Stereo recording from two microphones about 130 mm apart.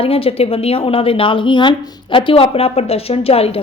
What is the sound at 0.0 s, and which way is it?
A woman's voice, 45° left (ahead or behind).